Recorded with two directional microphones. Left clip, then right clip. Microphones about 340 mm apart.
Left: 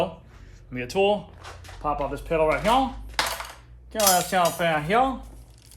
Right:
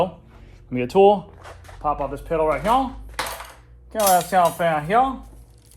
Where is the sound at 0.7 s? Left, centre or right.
Centre.